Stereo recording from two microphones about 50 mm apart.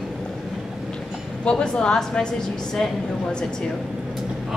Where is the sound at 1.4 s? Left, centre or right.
Centre.